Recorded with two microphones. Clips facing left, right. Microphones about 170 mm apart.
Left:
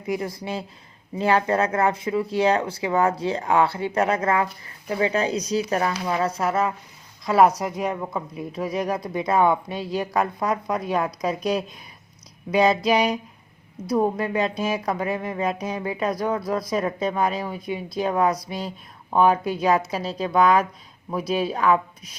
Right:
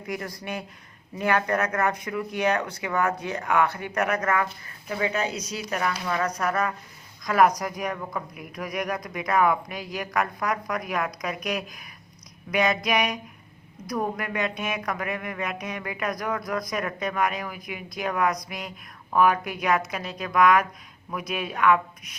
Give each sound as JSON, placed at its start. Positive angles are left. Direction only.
{"t": 0.0, "sound": "speech", "side_deg": 25}